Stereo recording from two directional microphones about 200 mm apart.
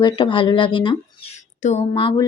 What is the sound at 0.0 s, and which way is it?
A woman's voice, 25° left (ahead or behind).